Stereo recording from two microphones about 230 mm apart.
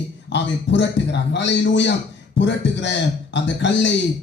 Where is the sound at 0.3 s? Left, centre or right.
Left.